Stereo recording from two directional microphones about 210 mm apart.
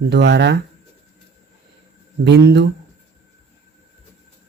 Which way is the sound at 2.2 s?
55° right (ahead or behind).